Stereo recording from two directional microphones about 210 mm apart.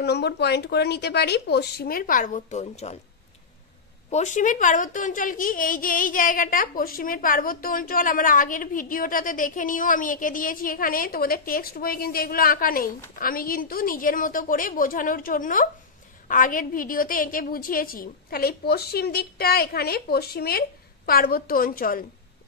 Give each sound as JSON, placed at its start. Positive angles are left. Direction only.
{"t": 0.0, "sound": "a woman's voice", "side_deg": 50}
{"t": 4.1, "sound": "a woman's voice", "side_deg": 35}